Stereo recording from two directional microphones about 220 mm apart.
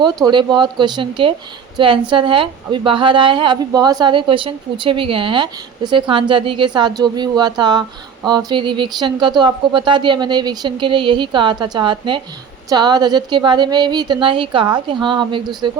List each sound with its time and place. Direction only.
0.0 s a woman's voice: 20° right (ahead or behind)